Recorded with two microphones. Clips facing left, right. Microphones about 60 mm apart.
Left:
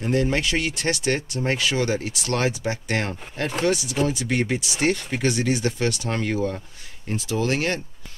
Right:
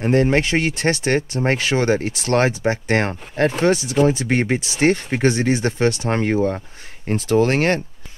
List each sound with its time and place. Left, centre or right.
0.0 s speech: right
7.1 s speech: right